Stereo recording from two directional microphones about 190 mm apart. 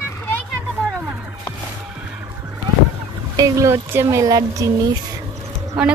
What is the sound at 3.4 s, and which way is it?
A woman's voice, 15° right (ahead or behind).